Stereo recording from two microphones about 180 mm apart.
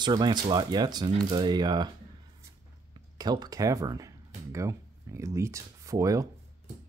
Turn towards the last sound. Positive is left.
turn(degrees=-20)  # may be behind; listen again after turning